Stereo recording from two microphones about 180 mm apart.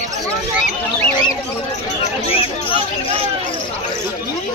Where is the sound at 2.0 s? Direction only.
30° left (ahead or behind).